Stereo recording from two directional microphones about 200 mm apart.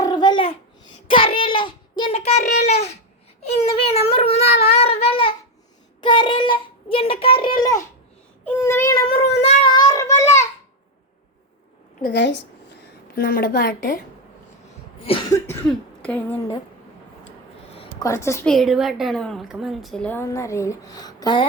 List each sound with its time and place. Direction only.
0.0 s babbling: 20° left (ahead or behind)
1.0 s child singing: 25° left (ahead or behind)
2.6 s babbling: 35° left (ahead or behind)
3.4 s a sound: 30° left (ahead or behind)
6.0 s child singing: 25° left (ahead or behind)
8.4 s a sound: 10° left (ahead or behind)
9.4 s a sound: 35° left (ahead or behind)
9.7 s child singing: 20° left (ahead or behind)
12.0 s a sound: 60° left (ahead or behind)
13.1 s a woman's voice: 45° left (ahead or behind)
15.1 s cough: 30° left (ahead or behind)
16.0 s a woman's voice: 5° left (ahead or behind)
18.0 s a woman's voice: 15° left (ahead or behind)
18.4 s a woman's voice: centre (ahead or behind); by 21.4 s 20° left (ahead or behind)